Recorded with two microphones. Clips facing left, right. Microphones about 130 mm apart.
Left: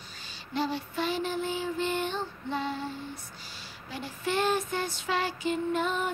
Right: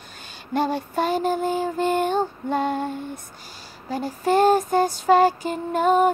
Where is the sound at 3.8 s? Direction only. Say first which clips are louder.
Right 10 dB; 40° right (ahead or behind).